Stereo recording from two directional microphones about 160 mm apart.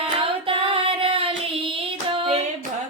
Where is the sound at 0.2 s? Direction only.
35° right (ahead or behind).